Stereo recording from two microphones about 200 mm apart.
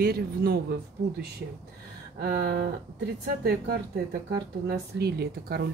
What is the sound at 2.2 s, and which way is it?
Speech, 50° right (ahead or behind).